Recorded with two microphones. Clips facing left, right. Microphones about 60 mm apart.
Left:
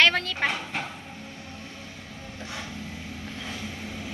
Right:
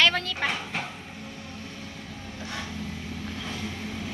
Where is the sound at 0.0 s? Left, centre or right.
Left.